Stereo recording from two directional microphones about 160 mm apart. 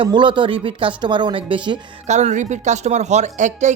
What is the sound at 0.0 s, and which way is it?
Speech, 30° right (ahead or behind).